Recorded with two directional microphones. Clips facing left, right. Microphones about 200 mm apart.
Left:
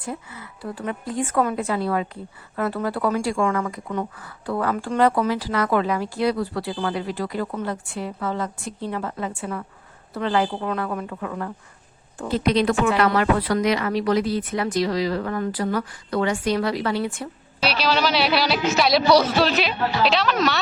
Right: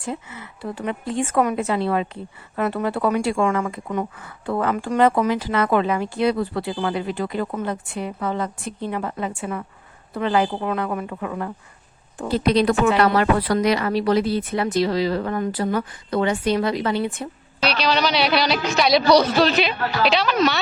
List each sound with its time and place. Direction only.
0.0 s a woman's voice: 25° right (ahead or behind)
12.3 s a woman's voice: 35° right (ahead or behind)
17.6 s speech: 5° left (ahead or behind)